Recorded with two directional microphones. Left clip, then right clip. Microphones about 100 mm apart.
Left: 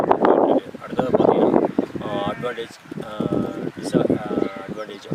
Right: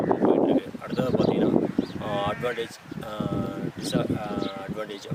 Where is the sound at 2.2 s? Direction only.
Centre (ahead or behind).